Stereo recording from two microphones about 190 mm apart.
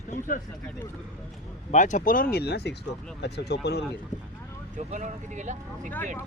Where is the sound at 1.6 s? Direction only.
40° left (ahead or behind); by 3.8 s 60° left (ahead or behind).